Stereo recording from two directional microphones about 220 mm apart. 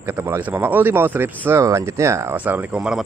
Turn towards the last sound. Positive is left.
turn(degrees=-5)  # may be behind; listen again after turning